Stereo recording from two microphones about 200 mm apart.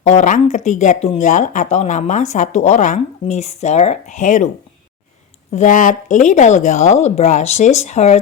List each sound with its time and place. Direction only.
0.0 s speech: 35° left (ahead or behind)
5.5 s speech: 40° left (ahead or behind)